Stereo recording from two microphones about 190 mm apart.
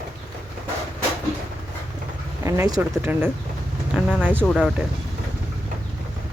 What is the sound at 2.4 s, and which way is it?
Speech, 15° right (ahead or behind).